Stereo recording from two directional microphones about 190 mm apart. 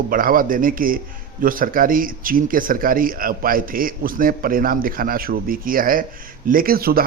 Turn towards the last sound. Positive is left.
turn(degrees=-50)  # may be behind; listen again after turning